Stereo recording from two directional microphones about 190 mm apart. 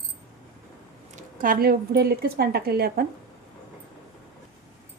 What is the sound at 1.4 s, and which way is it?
Speech, 50° right (ahead or behind).